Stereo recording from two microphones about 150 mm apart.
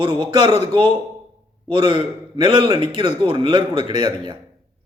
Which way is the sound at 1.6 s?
35° right (ahead or behind).